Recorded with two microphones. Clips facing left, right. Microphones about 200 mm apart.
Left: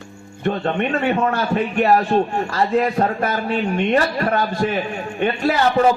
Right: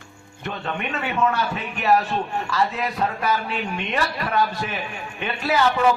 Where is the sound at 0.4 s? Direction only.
40° left (ahead or behind).